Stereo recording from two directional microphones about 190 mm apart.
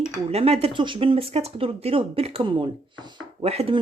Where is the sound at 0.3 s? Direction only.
35° right (ahead or behind).